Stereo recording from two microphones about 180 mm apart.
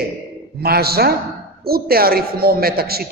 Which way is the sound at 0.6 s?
60° right (ahead or behind).